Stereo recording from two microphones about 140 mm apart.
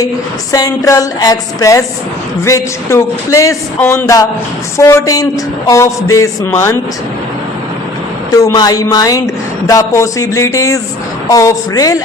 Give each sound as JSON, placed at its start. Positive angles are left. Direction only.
{"t": 0.5, "sound": "a woman's voice", "side_deg": 25}
{"t": 8.3, "sound": "a woman's voice", "side_deg": 25}